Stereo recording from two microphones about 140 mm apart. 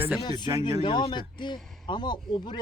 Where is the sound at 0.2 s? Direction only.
30° left (ahead or behind).